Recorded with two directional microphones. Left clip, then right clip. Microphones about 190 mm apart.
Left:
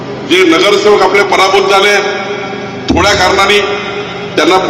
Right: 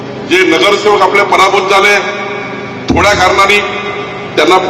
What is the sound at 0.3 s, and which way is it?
A man's voice, 15° right (ahead or behind).